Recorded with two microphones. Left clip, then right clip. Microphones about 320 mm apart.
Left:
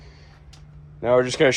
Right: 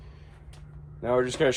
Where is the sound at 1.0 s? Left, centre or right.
Left.